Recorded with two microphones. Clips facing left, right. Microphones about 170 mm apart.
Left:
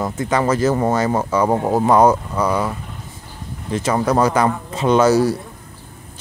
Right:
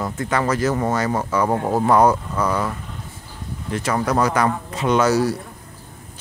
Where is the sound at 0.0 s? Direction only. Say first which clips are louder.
Left 3 dB; 20° left (ahead or behind).